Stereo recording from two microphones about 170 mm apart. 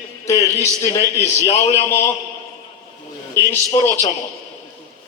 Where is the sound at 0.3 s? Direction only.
15° left (ahead or behind).